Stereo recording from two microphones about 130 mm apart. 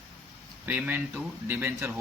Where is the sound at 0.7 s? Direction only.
15° right (ahead or behind).